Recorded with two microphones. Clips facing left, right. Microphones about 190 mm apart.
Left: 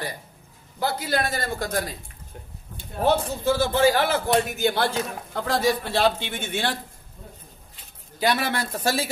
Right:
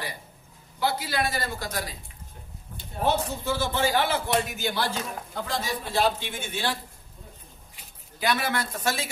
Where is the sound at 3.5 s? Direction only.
40° left (ahead or behind); by 6.8 s 65° left (ahead or behind).